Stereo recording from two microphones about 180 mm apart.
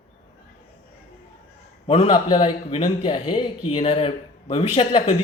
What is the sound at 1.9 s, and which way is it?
Speech, 30° left (ahead or behind).